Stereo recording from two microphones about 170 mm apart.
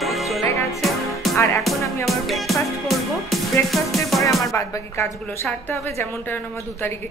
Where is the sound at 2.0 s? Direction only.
Centre (ahead or behind).